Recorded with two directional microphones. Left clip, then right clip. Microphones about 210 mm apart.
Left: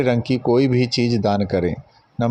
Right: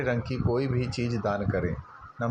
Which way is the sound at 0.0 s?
55° left (ahead or behind).